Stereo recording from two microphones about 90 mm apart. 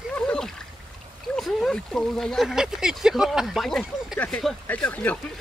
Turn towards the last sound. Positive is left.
turn(degrees=15)  # may be behind; listen again after turning